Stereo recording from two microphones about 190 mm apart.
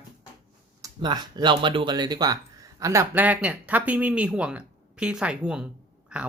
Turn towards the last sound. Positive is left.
turn(degrees=-5)  # may be behind; listen again after turning